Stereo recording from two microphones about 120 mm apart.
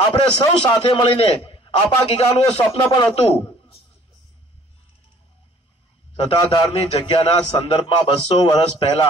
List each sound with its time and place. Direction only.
0.1 s a man's voice: 45° left (ahead or behind)
6.1 s a man's voice: 45° left (ahead or behind)
8.5 s a man's voice: 45° left (ahead or behind)